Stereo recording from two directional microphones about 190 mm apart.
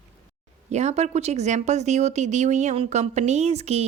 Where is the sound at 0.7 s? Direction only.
35° right (ahead or behind).